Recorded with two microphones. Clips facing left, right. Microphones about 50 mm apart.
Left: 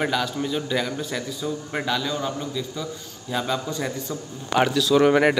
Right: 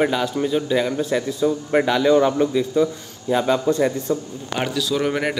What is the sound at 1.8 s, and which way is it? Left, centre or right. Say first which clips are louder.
Speech: right 10 dB; right.